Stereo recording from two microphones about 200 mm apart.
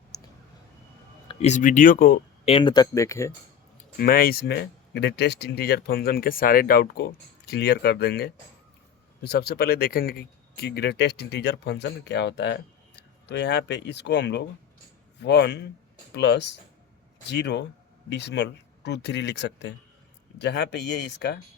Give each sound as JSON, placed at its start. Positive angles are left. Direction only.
{"t": 0.1, "sound": "clicking", "side_deg": 20}
{"t": 1.3, "sound": "speech", "side_deg": 35}
{"t": 2.4, "sound": "speech", "side_deg": 25}
{"t": 3.9, "sound": "speech", "side_deg": 45}